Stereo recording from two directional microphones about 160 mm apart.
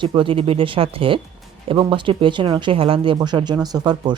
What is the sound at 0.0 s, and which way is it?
Speech, 30° right (ahead or behind).